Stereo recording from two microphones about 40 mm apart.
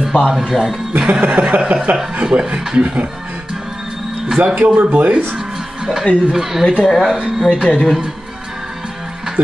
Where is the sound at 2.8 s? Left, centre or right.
Right.